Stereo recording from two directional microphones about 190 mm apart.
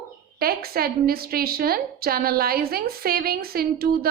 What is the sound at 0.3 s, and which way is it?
Speech, 55° right (ahead or behind).